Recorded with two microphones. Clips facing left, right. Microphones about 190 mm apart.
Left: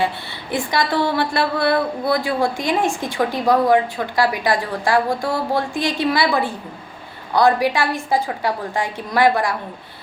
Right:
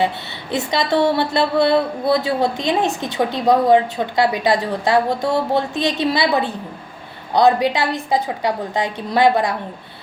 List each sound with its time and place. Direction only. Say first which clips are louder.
0.5 s a woman's voice: right 2 dB; 25° right (ahead or behind)